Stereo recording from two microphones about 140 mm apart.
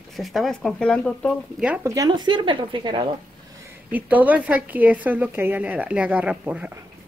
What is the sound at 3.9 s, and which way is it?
A woman's voice, 10° right (ahead or behind).